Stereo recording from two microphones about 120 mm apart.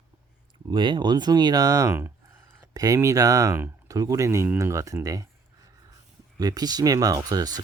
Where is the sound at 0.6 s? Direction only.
40° right (ahead or behind).